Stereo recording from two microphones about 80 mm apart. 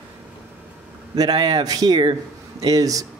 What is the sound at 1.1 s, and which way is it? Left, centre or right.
Speech, right.